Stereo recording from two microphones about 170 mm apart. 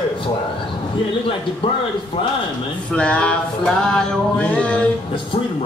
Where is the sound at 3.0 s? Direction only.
5° left (ahead or behind).